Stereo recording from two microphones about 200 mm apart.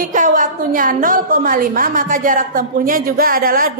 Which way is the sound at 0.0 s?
40° right (ahead or behind).